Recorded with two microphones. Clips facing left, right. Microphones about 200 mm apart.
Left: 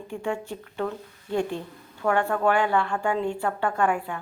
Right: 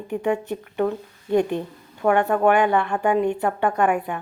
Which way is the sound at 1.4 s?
60° right (ahead or behind).